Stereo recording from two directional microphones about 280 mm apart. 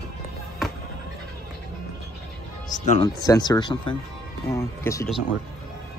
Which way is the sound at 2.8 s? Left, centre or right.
Centre.